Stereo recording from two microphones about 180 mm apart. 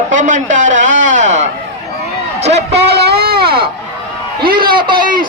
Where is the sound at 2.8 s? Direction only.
65° right (ahead or behind).